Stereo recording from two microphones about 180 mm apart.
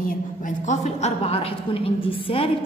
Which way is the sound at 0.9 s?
40° left (ahead or behind).